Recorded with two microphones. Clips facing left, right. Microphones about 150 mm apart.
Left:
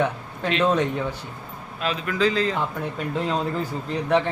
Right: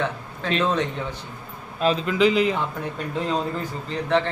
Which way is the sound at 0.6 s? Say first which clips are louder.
Left 3 dB; 10° left (ahead or behind).